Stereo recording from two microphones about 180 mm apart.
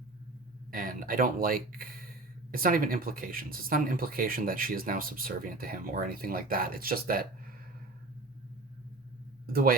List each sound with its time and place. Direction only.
0.7 s speech: 50° right (ahead or behind)
9.5 s speech: 55° right (ahead or behind)